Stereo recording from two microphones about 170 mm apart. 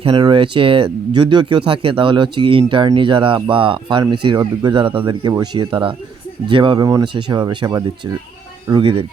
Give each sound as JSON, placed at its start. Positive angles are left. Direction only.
{"t": 0.0, "sound": "speech", "side_deg": -30}